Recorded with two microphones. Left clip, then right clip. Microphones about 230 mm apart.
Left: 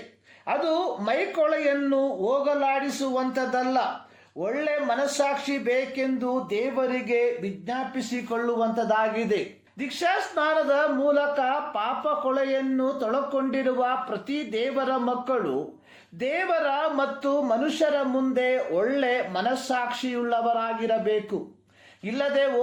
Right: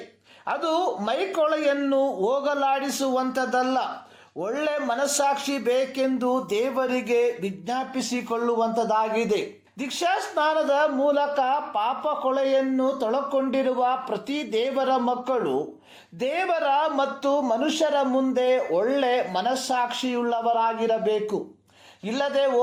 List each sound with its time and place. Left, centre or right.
0.4 s a man's voice: right